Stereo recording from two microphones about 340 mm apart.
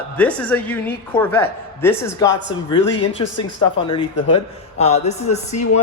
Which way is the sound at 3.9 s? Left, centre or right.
Centre.